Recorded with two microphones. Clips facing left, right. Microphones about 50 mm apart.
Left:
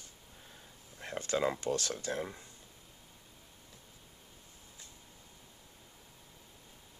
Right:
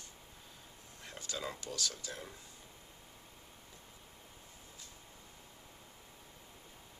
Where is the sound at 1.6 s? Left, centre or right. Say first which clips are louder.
Left 7 dB; left.